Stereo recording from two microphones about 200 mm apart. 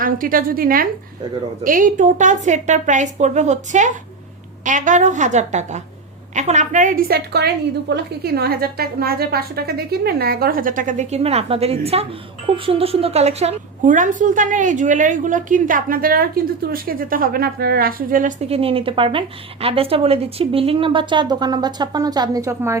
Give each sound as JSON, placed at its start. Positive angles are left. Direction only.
{"t": 0.0, "sound": "a woman's voice", "side_deg": -45}